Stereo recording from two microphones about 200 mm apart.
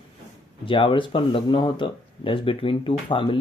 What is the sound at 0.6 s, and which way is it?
Speech, 25° left (ahead or behind).